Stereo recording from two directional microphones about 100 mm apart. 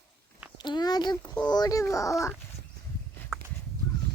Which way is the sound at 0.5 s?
45° left (ahead or behind).